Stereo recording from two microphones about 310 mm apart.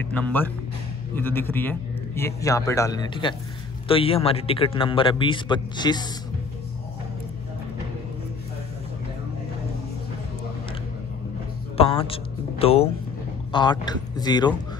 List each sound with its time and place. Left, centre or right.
0.1 s a man's voice: centre
11.7 s a man's voice: centre